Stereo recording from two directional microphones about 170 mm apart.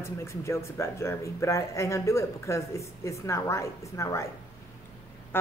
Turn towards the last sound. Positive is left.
turn(degrees=10)  # may be behind; listen again after turning